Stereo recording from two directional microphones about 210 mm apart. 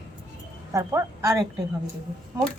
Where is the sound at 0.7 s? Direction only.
15° right (ahead or behind).